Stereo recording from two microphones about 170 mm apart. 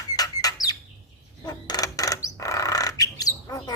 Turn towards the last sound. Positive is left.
turn(degrees=20)  # may be behind; listen again after turning